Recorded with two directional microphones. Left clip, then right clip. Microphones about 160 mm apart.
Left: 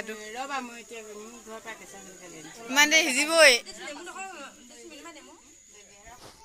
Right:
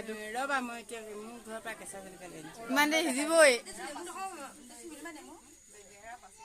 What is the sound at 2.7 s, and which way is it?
Speech, 10° right (ahead or behind).